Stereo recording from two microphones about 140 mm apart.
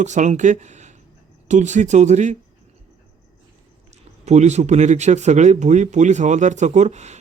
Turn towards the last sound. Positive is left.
turn(degrees=-55)  # may be behind; listen again after turning